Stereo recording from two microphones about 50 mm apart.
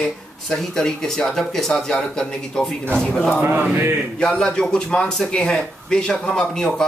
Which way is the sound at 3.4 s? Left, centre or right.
Right.